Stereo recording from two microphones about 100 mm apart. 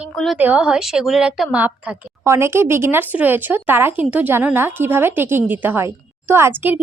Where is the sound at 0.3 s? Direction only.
15° right (ahead or behind).